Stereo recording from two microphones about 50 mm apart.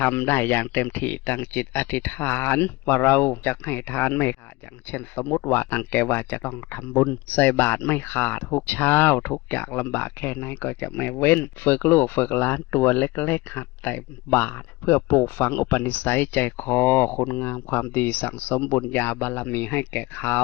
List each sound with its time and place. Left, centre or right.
0.0 s speech: left